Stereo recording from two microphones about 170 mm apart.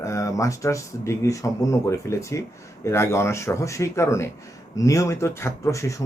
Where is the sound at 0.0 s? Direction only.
20° left (ahead or behind).